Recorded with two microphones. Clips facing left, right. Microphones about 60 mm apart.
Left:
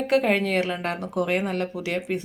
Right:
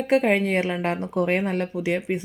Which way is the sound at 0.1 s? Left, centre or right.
Centre.